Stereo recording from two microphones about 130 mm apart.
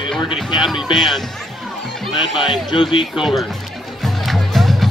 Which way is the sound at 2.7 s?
40° left (ahead or behind).